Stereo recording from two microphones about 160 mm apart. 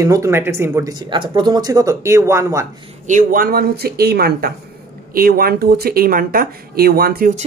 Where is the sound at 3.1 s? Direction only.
55° right (ahead or behind); by 7.3 s 70° right (ahead or behind).